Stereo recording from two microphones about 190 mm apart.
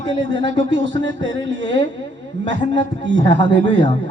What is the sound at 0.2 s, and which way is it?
A woman's voice, 70° right (ahead or behind).